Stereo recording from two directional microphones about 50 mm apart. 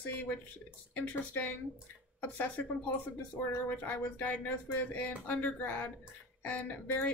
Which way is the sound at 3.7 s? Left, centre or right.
Left.